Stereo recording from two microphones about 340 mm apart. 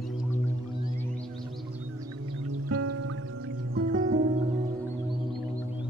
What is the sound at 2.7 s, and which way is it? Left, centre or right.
Music, right.